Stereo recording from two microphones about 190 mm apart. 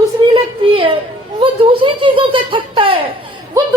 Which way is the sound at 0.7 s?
30° right (ahead or behind).